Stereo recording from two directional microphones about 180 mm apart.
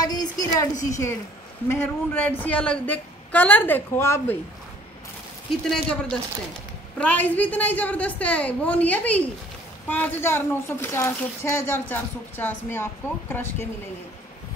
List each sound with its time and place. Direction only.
0.0 s a sound: 20° left (ahead or behind)
0.8 s speech: 15° left (ahead or behind)
5.7 s speech: 5° left (ahead or behind)